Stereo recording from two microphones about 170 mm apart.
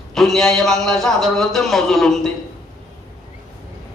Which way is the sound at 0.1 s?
Centre (ahead or behind).